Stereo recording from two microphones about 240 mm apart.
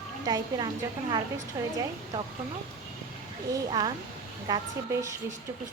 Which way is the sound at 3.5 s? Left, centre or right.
Centre.